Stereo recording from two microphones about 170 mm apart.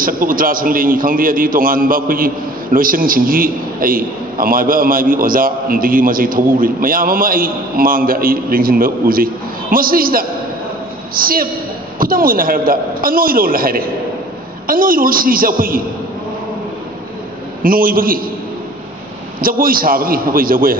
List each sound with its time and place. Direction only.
0.0 s a man's voice: 55° right (ahead or behind)
17.6 s a man's voice: 55° right (ahead or behind)
19.4 s a man's voice: 55° right (ahead or behind)